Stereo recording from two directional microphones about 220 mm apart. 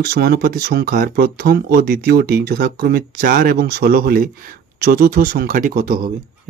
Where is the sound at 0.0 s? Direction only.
45° right (ahead or behind).